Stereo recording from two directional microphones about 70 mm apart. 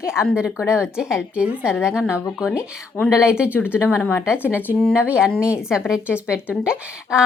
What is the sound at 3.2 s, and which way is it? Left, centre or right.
Speech, centre.